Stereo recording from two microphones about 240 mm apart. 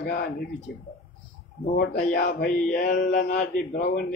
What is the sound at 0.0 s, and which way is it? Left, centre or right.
Speech, left.